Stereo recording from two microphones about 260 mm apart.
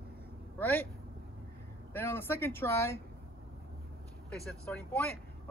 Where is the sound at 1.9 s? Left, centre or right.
Centre.